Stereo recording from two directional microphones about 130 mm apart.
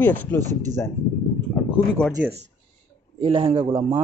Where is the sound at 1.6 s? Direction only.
20° left (ahead or behind).